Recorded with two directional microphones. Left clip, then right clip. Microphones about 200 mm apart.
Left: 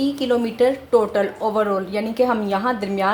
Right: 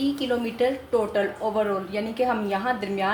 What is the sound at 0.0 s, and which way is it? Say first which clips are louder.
A woman's voice: left 5 dB; 35° left (ahead or behind).